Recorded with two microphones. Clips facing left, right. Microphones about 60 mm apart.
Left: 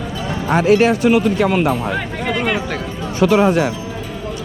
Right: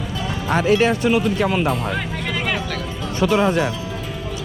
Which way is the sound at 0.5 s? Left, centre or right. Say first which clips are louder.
Left 4 dB; left.